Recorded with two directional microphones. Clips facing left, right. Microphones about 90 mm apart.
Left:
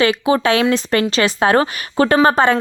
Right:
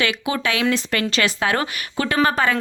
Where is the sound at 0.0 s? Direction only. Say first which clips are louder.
Left 8 dB; 35° left (ahead or behind).